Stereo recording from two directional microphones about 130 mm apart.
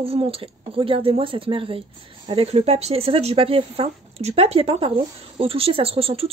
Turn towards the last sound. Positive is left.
turn(degrees=-50)  # may be behind; listen again after turning